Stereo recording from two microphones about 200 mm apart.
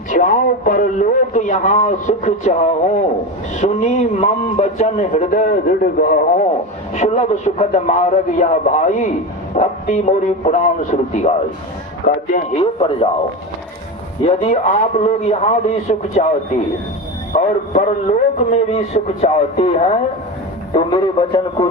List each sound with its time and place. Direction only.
0.1 s a man's voice: 40° left (ahead or behind)
14.4 s a man's voice: 40° left (ahead or behind)
17.3 s a man's voice: 35° left (ahead or behind)
20.7 s a man's voice: 20° left (ahead or behind)